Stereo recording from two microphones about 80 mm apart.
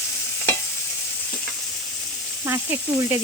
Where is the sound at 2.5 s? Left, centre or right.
Right.